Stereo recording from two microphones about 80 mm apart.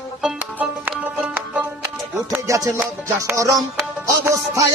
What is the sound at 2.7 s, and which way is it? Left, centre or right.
Music, right.